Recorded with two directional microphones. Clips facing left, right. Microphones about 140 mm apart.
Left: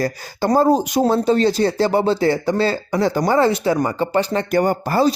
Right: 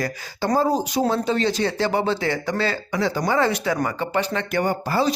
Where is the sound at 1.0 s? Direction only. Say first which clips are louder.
Left 4 dB; 40° left (ahead or behind).